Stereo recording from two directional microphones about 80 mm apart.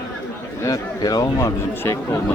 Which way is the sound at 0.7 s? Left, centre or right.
Left.